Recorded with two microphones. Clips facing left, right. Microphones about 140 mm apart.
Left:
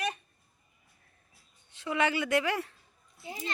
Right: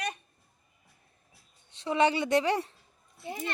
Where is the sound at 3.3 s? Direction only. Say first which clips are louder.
Right 3 dB; 60° right (ahead or behind).